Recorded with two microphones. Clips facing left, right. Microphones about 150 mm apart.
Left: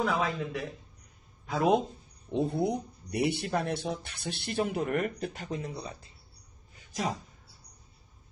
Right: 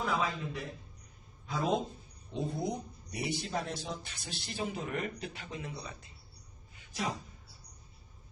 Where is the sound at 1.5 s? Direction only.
70° left (ahead or behind); by 5.9 s 40° left (ahead or behind).